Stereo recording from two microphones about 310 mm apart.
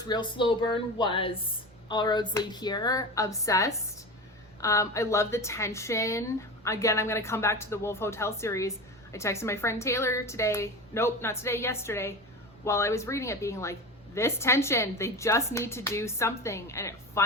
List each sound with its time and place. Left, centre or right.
0.1 s a woman's voice: centre